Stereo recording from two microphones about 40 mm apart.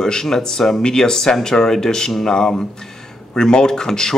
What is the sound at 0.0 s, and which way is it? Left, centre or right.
A man's voice, centre.